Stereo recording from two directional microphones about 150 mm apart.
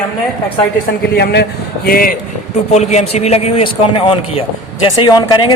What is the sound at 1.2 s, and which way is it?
Speech, 90° left.